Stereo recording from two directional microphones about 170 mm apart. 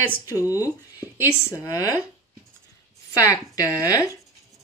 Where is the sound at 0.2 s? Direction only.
20° left (ahead or behind).